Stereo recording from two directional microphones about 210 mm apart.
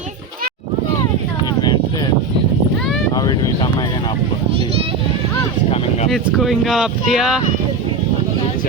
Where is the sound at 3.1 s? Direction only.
20° left (ahead or behind).